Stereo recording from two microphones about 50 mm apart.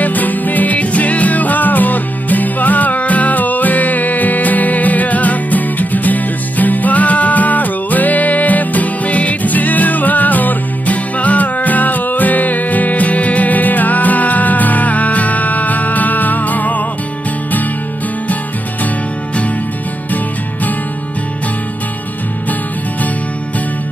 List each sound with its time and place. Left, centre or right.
0.0 s music: left